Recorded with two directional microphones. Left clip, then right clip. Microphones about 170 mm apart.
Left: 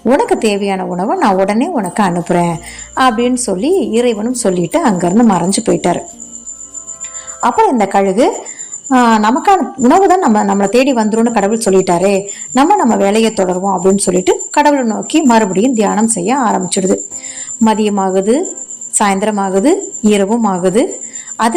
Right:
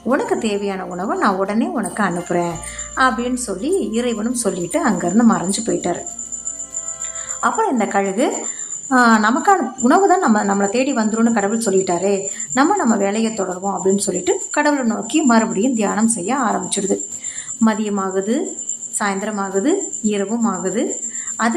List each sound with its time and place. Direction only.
0.1 s a woman's voice: 30° left (ahead or behind)
7.4 s a woman's voice: 25° left (ahead or behind)
18.9 s a woman's voice: 45° left (ahead or behind)